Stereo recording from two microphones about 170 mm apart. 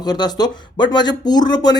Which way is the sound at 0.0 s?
25° left (ahead or behind).